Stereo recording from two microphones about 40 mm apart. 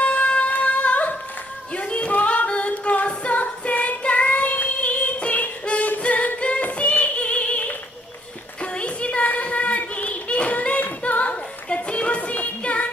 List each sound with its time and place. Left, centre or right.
0.0 s music: left
1.8 s a capella: left
6.4 s female singing: left
8.7 s a sound: left
10.8 s female singing: left